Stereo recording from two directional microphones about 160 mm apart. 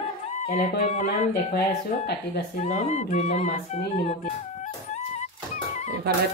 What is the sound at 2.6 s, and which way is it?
Speech, 40° left (ahead or behind).